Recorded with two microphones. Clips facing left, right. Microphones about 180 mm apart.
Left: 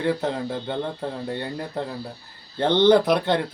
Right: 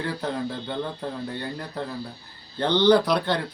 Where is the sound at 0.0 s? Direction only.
20° left (ahead or behind).